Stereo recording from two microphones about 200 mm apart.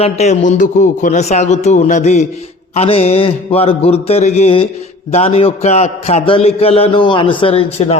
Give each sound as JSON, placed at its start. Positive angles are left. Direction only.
{"t": 0.0, "sound": "a man's voice", "side_deg": 35}